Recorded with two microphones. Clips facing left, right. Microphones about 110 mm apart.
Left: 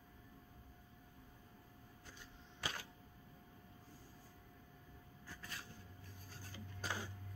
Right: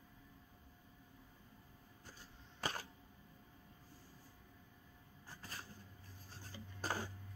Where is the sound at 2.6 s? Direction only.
45° right (ahead or behind).